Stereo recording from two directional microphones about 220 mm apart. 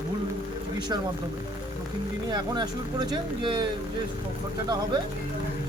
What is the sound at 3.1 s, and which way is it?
Speech, 20° right (ahead or behind).